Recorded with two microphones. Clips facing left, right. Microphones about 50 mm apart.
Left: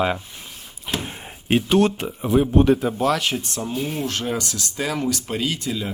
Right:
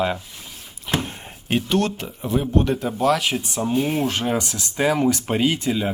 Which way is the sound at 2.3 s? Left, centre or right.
Centre.